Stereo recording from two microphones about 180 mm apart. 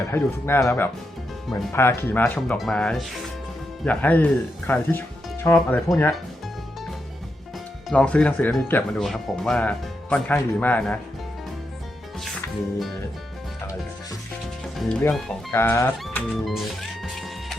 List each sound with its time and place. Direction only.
0.1 s speech: 15° left (ahead or behind)
5.5 s speech: centre (ahead or behind)
7.9 s speech: 5° left (ahead or behind)
14.8 s speech: centre (ahead or behind)
16.0 s music: centre (ahead or behind)